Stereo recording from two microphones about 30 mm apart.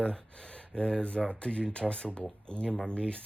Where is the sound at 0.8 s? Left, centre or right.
Left.